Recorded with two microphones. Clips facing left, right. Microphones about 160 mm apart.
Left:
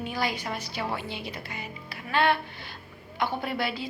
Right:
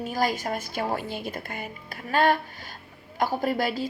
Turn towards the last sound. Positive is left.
turn(degrees=-45)  # may be behind; listen again after turning